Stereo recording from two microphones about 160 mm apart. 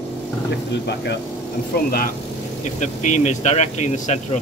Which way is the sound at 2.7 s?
50° left (ahead or behind).